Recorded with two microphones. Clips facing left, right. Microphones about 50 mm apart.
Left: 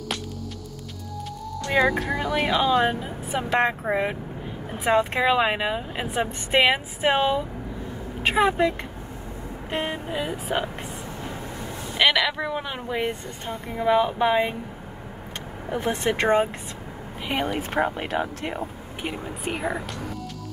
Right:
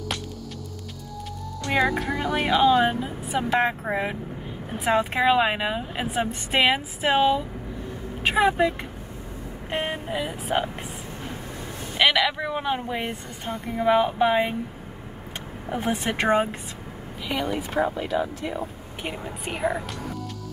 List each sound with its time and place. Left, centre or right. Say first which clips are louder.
1.7 s speech: left 1 dB; centre
9.8 s speech: even; centre
12.0 s speech: even; centre
15.7 s speech: left 2 dB; centre
17.2 s speech: left 1 dB; left
19.0 s speech: left 2 dB; centre